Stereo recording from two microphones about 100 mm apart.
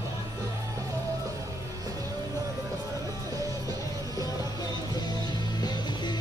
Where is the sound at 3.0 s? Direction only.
35° right (ahead or behind).